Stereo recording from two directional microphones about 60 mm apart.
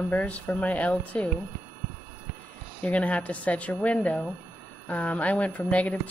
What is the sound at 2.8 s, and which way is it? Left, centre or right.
Speech, left.